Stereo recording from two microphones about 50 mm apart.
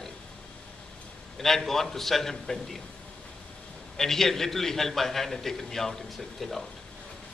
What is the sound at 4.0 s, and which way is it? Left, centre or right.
A man's voice, centre.